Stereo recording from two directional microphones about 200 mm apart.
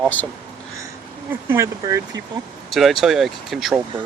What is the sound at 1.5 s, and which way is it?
Speech, 15° right (ahead or behind).